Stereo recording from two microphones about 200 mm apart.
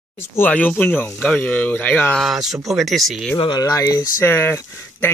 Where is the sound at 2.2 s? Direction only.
Centre (ahead or behind).